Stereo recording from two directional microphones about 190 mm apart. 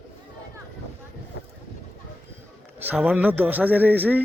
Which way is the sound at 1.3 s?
90° left.